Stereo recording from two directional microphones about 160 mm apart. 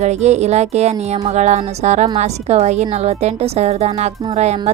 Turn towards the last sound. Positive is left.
turn(degrees=-45)  # may be behind; listen again after turning